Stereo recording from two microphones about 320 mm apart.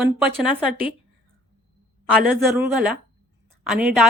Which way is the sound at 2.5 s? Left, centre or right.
Centre.